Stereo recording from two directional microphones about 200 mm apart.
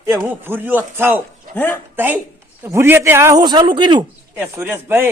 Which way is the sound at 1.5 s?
10° left (ahead or behind).